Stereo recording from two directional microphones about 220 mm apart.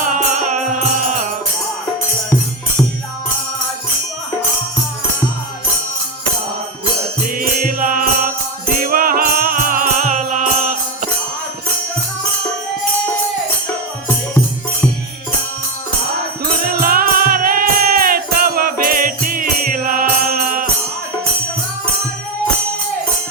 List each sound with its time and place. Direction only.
0.0 s music: 35° right (ahead or behind)
7.3 s music: 40° right (ahead or behind)
16.4 s music: 45° right (ahead or behind)